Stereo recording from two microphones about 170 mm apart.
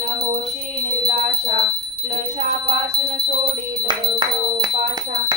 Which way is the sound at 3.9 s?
25° right (ahead or behind).